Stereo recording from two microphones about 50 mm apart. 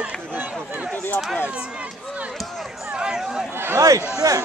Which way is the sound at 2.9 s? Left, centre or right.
Centre.